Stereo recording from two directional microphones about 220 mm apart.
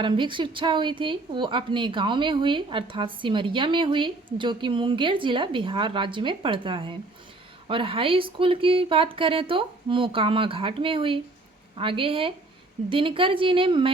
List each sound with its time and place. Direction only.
0.0 s a woman's voice: 20° right (ahead or behind)